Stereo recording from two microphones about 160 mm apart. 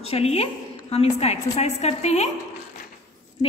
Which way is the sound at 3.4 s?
40° left (ahead or behind).